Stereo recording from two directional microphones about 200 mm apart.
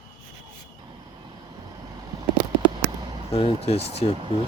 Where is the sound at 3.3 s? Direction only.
30° left (ahead or behind).